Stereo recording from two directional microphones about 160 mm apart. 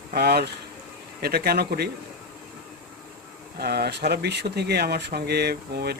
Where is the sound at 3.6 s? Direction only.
85° right.